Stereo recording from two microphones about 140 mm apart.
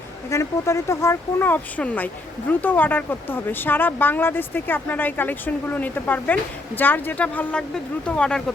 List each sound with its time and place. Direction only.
0.3 s speech: 20° left (ahead or behind)